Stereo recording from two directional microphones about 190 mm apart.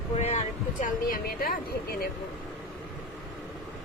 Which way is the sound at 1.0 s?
50° left (ahead or behind).